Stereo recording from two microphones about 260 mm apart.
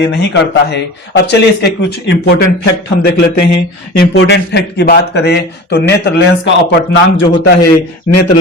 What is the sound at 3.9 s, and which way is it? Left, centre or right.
Speech, left.